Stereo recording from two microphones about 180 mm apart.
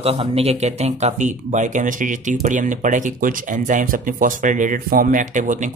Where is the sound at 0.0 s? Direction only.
30° right (ahead or behind).